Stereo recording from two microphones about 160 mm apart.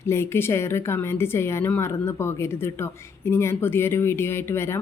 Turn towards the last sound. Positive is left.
turn(degrees=15)  # may be behind; listen again after turning